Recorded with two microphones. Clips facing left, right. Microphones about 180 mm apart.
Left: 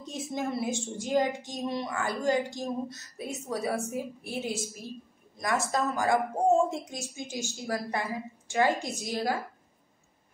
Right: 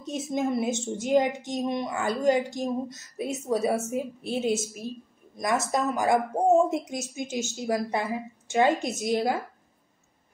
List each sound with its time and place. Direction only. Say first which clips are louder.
0.0 s a woman's voice: right 5 dB; 20° right (ahead or behind)